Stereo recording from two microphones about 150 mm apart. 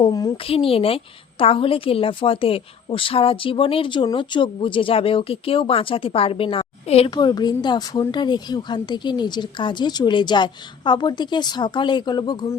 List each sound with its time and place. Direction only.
0.0 s speech: 25° left (ahead or behind)
0.4 s a woman's voice: 40° left (ahead or behind)
7.1 s speech: 30° left (ahead or behind)